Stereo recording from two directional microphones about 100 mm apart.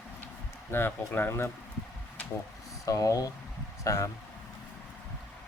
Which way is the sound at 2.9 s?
35° left (ahead or behind).